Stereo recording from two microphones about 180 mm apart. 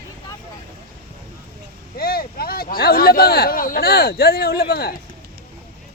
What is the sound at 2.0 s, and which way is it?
Speech, 55° left (ahead or behind).